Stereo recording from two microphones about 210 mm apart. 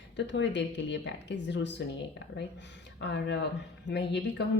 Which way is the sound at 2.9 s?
55° left (ahead or behind).